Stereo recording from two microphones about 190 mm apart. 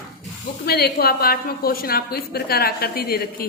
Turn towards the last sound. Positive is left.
turn(degrees=55)  # may be behind; listen again after turning